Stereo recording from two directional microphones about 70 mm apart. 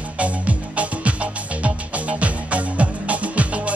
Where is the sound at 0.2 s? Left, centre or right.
Centre.